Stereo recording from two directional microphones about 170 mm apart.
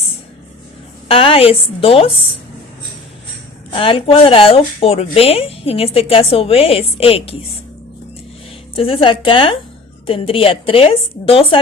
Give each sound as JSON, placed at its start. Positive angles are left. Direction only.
{"t": 1.0, "sound": "speech", "side_deg": 35}
{"t": 3.7, "sound": "speech", "side_deg": 30}
{"t": 8.7, "sound": "speech", "side_deg": 30}